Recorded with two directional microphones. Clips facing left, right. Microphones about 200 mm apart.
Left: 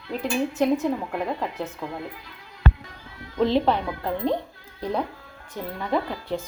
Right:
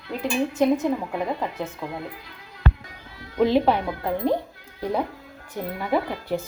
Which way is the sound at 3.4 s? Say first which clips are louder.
Right 2 dB; 5° right (ahead or behind).